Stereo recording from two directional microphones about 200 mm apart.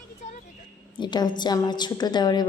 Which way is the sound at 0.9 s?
20° left (ahead or behind).